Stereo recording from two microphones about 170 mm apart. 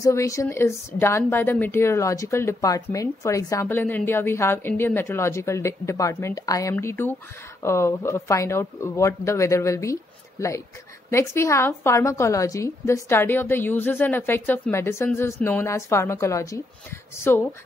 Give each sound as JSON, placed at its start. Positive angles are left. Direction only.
{"t": 0.0, "sound": "speech", "side_deg": 15}